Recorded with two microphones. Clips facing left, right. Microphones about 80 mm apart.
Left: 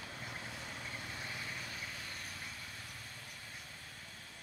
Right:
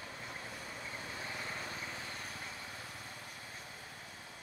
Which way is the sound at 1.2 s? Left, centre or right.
Right.